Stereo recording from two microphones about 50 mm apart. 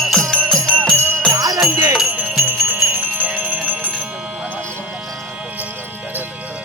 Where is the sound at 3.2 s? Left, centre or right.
Right.